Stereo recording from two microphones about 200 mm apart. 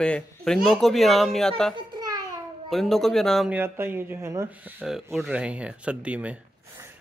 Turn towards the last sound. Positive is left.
turn(degrees=-10)  # may be behind; listen again after turning